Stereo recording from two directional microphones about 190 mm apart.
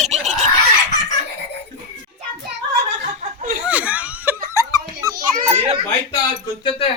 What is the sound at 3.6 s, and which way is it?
Laughter, 5° right (ahead or behind).